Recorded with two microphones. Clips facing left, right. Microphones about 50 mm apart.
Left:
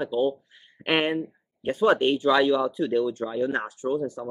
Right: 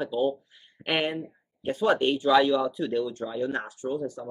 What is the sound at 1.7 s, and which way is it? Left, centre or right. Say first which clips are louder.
Speech: left 3 dB; centre.